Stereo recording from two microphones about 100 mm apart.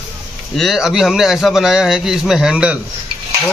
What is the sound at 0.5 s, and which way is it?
A man's voice, centre (ahead or behind).